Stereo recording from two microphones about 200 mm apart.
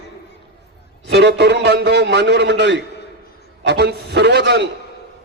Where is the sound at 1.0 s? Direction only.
55° right (ahead or behind).